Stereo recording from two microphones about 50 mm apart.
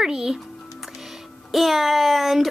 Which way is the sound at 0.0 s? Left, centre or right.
Centre.